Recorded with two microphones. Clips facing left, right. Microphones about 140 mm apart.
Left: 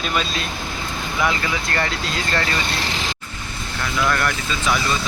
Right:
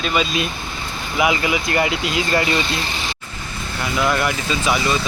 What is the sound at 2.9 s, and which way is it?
Vehicle, 90° left.